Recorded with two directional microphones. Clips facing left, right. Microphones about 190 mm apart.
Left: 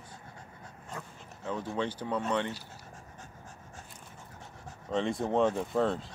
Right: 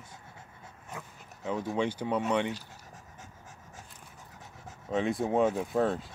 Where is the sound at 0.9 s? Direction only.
15° right (ahead or behind).